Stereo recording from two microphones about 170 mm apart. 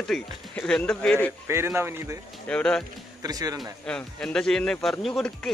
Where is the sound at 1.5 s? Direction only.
15° right (ahead or behind).